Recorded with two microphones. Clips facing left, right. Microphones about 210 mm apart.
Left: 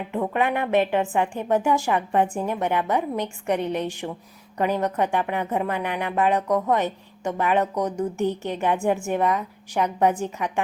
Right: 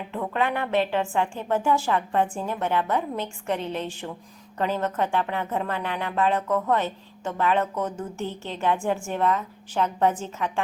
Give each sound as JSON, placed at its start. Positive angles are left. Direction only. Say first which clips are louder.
{"t": 0.1, "sound": "speech", "louder": "left 3 dB", "side_deg": 15}